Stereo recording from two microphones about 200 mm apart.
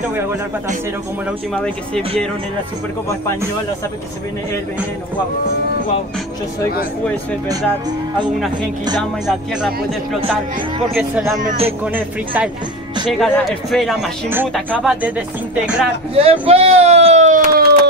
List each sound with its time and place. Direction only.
1.5 s speech: centre (ahead or behind)
9.2 s speech: 5° right (ahead or behind)
11.0 s speech: 5° right (ahead or behind)
11.4 s speech: 30° right (ahead or behind)
11.8 s speech: 10° right (ahead or behind)
16.2 s speech: 30° right (ahead or behind)